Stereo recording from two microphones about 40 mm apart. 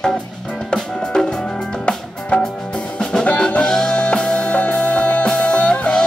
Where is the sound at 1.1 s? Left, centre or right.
Centre.